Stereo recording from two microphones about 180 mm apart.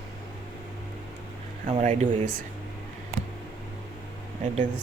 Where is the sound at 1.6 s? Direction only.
40° right (ahead or behind).